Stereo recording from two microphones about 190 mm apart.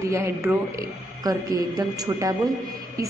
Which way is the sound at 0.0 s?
15° right (ahead or behind).